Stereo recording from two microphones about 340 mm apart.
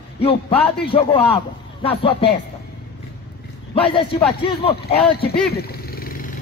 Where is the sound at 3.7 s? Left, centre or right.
Centre.